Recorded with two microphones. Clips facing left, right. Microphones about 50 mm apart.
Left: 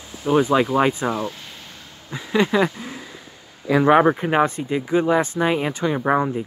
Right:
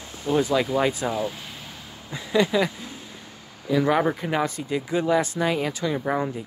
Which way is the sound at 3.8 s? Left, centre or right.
Left.